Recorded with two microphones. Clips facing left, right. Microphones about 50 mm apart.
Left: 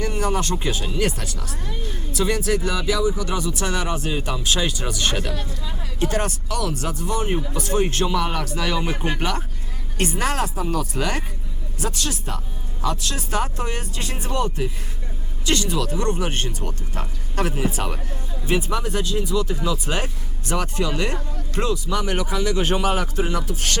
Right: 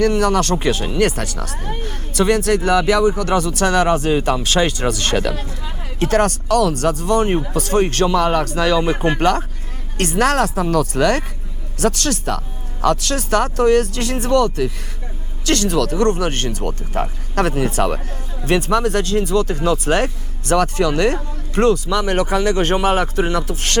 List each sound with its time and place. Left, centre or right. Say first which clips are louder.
0.0 s speech: right 8 dB; right
8.9 s speech: right 8 dB; right
10.0 s speech: right 7 dB; right
22.7 s speech: right 5 dB; right